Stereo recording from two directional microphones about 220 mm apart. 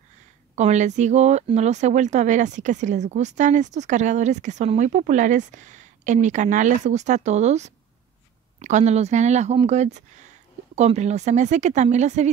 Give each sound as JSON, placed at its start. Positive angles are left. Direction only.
{"t": 0.6, "sound": "speech", "side_deg": -30}